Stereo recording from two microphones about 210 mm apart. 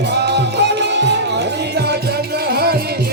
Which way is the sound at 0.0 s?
55° right (ahead or behind).